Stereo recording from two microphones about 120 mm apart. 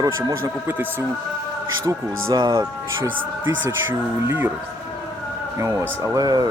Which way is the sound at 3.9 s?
15° right (ahead or behind).